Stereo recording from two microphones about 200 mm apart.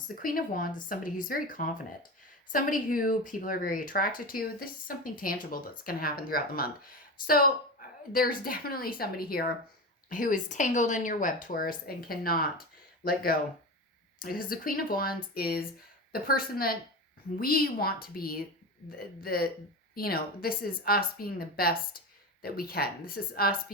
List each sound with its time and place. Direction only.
0.2 s speech: 45° left (ahead or behind)